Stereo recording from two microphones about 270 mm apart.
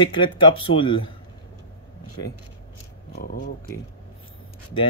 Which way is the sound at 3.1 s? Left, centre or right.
Left.